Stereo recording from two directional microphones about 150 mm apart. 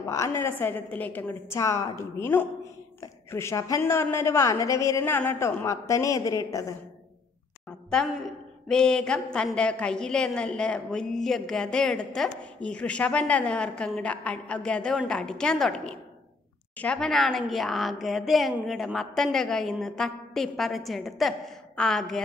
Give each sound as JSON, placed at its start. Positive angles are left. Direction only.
{"t": 0.0, "sound": "a woman's voice", "side_deg": 20}
{"t": 7.9, "sound": "a woman's voice", "side_deg": 0}